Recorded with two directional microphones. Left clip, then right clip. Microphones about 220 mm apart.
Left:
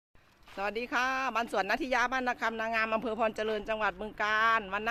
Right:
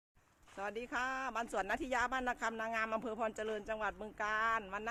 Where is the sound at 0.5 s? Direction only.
25° left (ahead or behind).